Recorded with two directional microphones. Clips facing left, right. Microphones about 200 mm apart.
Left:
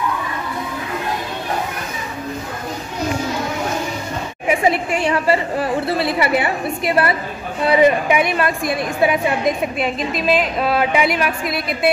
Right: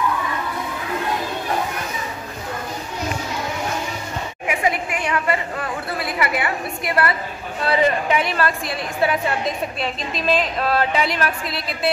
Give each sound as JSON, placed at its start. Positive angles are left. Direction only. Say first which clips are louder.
{"t": 4.5, "sound": "a woman's voice", "louder": "left 6 dB", "side_deg": 30}